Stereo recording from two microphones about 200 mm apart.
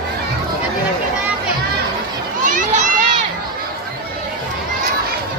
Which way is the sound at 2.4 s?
40° right (ahead or behind).